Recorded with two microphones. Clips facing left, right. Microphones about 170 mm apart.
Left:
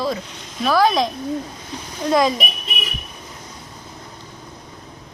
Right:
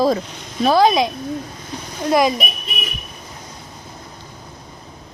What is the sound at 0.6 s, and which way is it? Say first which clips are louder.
Speech: right 3 dB; 25° right (ahead or behind).